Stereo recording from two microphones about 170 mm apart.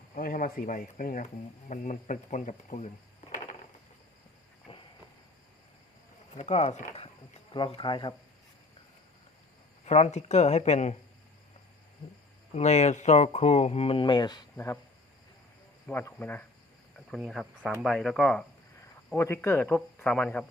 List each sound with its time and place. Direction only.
0.1 s speech: 55° left (ahead or behind)
4.7 s a sound: 35° left (ahead or behind)
6.3 s speech: 40° left (ahead or behind)
9.8 s speech: 40° left (ahead or behind)
12.5 s speech: 40° left (ahead or behind); by 14.4 s 25° left (ahead or behind)
14.5 s speech: 15° left (ahead or behind)
15.9 s speech: 10° left (ahead or behind)
17.1 s speech: centre (ahead or behind)
19.1 s speech: 15° left (ahead or behind)